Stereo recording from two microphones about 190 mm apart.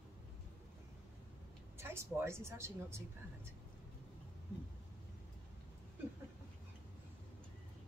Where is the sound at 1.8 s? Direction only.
15° right (ahead or behind).